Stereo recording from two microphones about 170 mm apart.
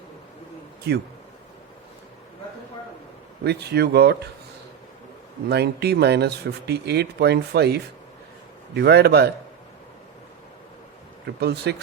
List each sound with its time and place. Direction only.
0.9 s speech: 75° right (ahead or behind)
3.4 s speech: 75° right (ahead or behind)
5.5 s speech: 75° right (ahead or behind)
11.3 s speech: 75° right (ahead or behind)